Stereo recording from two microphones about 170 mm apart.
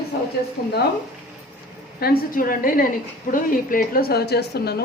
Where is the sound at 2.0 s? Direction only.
60° left (ahead or behind).